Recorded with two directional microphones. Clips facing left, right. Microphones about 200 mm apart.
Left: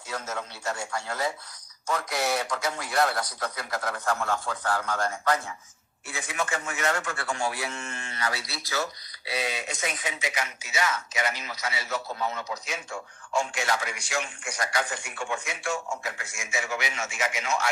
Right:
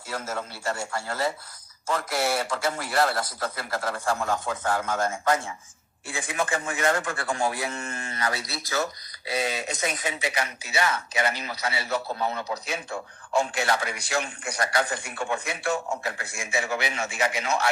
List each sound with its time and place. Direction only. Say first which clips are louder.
0.1 s a man's voice: right 2 dB; 5° right (ahead or behind); by 17.7 s 35° right (ahead or behind)